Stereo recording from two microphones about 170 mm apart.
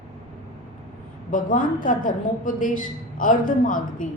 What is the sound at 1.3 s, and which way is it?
A woman's voice, 50° left (ahead or behind).